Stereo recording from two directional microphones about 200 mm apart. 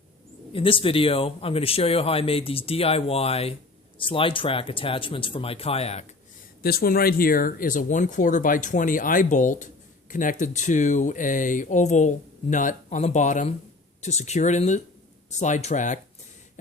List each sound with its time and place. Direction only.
0.5 s speech: 25° left (ahead or behind)
6.6 s speech: 50° left (ahead or behind)